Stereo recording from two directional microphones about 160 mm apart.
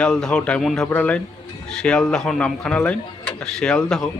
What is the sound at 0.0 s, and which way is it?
A man's voice, 5° left (ahead or behind).